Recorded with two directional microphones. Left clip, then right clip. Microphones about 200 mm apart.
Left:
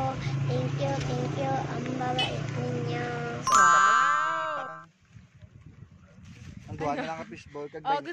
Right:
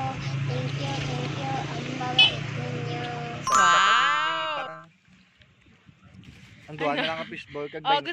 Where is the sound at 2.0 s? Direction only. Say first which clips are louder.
Right 10 dB; 20° left (ahead or behind).